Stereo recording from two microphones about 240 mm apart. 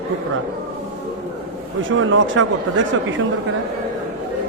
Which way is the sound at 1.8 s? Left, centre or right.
Right.